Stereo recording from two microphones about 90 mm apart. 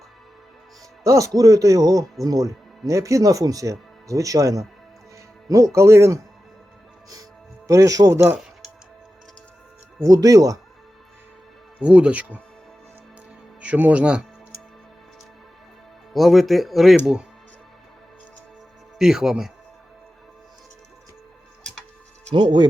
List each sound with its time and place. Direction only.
1.0 s speech: 35° right (ahead or behind)
7.7 s speech: 40° right (ahead or behind)
10.0 s speech: 40° right (ahead or behind)
11.8 s speech: 15° right (ahead or behind)
13.6 s speech: 15° right (ahead or behind)
16.1 s speech: centre (ahead or behind)
18.9 s speech: 5° right (ahead or behind)
22.4 s speech: 65° right (ahead or behind)